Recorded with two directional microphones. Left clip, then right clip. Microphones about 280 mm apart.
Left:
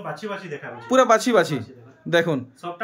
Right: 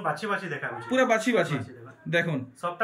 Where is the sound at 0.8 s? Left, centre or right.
Centre.